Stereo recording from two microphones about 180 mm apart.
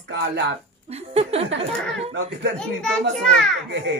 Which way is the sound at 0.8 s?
35° right (ahead or behind).